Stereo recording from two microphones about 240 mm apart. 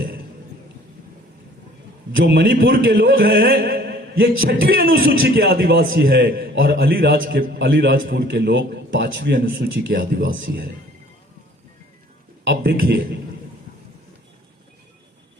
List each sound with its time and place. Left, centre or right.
2.1 s a man's voice: right
12.5 s a man's voice: right